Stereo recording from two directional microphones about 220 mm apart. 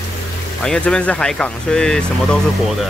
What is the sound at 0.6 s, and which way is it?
Speech, 5° left (ahead or behind).